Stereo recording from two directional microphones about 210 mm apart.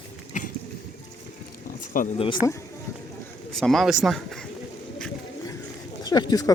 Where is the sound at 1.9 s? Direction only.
40° left (ahead or behind).